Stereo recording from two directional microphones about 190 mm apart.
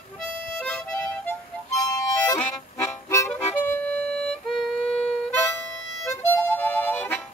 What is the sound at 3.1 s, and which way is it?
Music, 10° left (ahead or behind).